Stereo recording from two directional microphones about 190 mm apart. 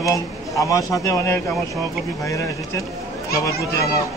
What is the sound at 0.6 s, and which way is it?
Speech, 15° left (ahead or behind).